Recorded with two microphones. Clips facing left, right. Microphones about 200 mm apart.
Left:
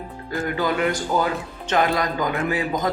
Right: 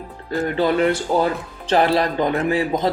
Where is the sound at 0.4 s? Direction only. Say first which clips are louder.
Right 5 dB; 25° right (ahead or behind).